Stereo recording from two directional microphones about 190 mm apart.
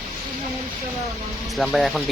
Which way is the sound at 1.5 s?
Centre (ahead or behind).